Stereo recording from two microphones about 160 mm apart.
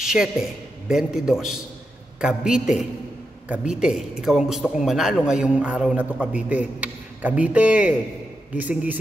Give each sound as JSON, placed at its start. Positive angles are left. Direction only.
{"t": 0.0, "sound": "a man's voice", "side_deg": -5}